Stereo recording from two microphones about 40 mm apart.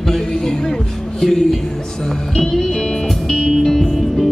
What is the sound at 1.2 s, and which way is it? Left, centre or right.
Male singing, centre.